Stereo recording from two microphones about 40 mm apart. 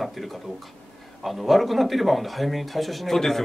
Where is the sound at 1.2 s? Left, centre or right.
Centre.